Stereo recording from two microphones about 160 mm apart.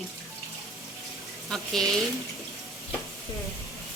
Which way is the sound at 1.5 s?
Centre (ahead or behind).